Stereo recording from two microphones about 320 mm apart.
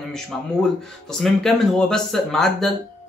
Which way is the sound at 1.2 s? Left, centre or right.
Centre.